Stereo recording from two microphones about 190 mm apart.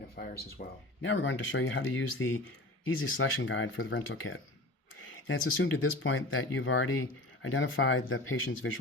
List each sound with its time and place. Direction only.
0.2 s speech: 55° left (ahead or behind)
1.0 s speech: 85° left